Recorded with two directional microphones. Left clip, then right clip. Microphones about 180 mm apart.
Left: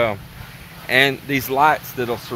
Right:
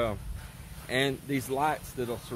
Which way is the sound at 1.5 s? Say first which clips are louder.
Left 14 dB; 5° left (ahead or behind).